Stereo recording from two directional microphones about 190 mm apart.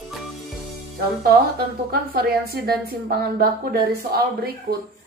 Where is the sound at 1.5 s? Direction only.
55° right (ahead or behind).